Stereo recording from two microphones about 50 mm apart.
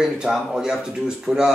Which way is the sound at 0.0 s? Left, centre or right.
Centre.